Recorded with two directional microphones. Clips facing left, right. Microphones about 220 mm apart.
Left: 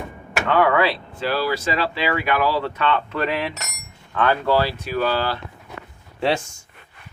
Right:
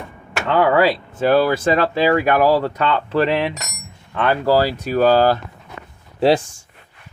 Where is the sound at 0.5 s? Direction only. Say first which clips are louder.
Right 3 dB; 30° right (ahead or behind).